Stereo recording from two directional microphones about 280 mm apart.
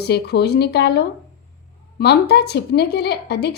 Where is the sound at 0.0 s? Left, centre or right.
Left.